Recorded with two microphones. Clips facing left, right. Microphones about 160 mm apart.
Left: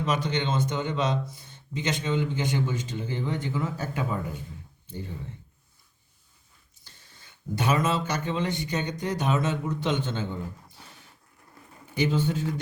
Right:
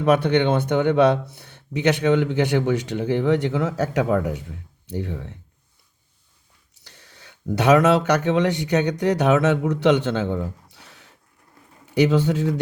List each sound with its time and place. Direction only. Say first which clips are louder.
0.0 s speech: right 10 dB; 60° right (ahead or behind)
6.7 s speech: right 7 dB; 75° right (ahead or behind)